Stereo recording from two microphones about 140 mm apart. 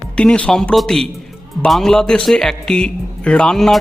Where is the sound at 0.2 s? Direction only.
5° left (ahead or behind).